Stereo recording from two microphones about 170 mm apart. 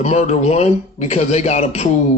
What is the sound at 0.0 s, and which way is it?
Speech, 40° left (ahead or behind).